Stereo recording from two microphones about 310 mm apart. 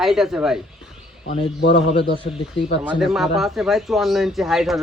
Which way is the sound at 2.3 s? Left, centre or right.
Left.